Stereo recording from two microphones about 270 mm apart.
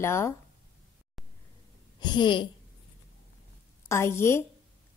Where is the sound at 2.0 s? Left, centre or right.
Centre.